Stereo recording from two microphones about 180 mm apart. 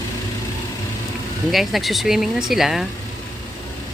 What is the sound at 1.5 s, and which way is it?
Speech, centre (ahead or behind).